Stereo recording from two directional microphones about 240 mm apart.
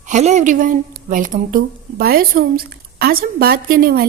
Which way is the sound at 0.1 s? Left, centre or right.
Right.